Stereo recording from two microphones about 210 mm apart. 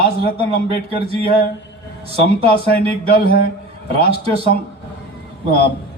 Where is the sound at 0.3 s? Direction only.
25° right (ahead or behind).